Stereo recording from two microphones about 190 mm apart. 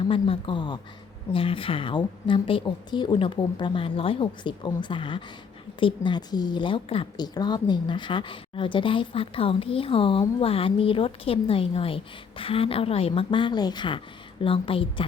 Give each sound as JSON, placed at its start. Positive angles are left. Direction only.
{"t": 0.1, "sound": "a woman's voice", "side_deg": 25}